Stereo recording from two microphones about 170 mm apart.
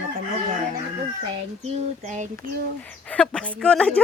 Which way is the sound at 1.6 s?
45° right (ahead or behind).